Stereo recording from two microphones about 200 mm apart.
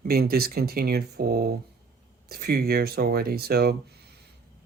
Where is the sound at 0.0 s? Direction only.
50° right (ahead or behind).